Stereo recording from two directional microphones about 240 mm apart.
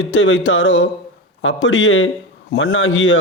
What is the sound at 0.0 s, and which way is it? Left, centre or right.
A man's voice, left.